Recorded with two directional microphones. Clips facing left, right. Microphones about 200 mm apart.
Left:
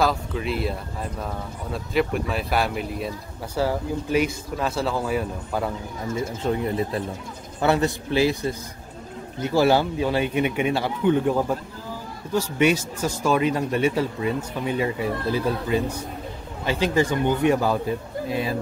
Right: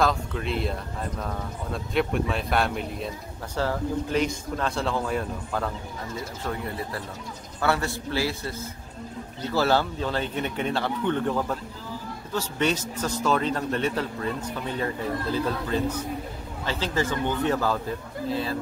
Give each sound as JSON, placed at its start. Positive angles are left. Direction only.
{"t": 0.0, "sound": "a man's voice", "side_deg": 5}
{"t": 6.4, "sound": "a man's voice", "side_deg": 20}